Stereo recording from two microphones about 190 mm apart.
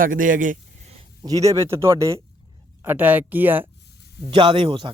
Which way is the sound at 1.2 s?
20° right (ahead or behind).